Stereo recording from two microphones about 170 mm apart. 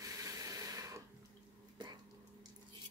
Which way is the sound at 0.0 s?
20° right (ahead or behind).